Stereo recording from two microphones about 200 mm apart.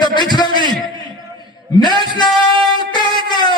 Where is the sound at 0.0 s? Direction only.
20° left (ahead or behind).